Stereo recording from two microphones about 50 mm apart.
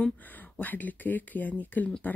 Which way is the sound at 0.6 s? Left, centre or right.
Left.